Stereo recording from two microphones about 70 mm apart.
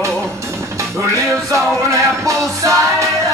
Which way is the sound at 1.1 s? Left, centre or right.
Right.